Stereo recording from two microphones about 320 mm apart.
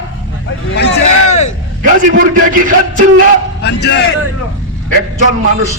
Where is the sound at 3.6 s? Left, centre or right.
Left.